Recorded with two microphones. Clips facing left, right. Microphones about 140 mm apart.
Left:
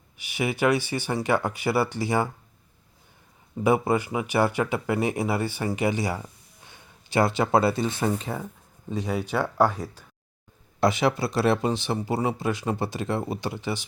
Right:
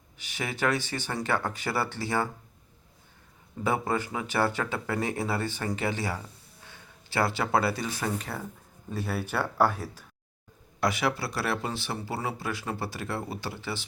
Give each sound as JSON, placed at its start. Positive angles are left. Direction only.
{"t": 0.2, "sound": "speech", "side_deg": 10}
{"t": 3.6, "sound": "speech", "side_deg": 15}
{"t": 9.6, "sound": "speech", "side_deg": -10}
{"t": 10.8, "sound": "speech", "side_deg": 25}